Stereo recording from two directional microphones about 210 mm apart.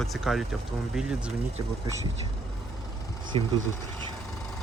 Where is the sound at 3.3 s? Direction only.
25° right (ahead or behind).